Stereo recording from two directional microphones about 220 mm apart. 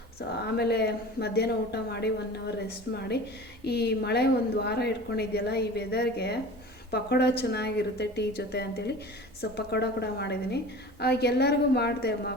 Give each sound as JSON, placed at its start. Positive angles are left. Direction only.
{"t": 0.2, "sound": "a woman's voice", "side_deg": 45}